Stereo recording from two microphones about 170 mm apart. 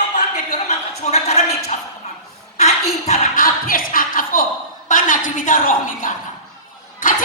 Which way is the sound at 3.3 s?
55° left (ahead or behind).